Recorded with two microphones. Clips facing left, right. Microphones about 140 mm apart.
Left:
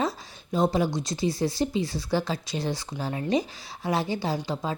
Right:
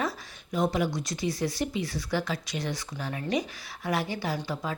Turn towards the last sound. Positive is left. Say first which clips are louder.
# left 3 dB
turn(degrees=25)  # may be behind; listen again after turning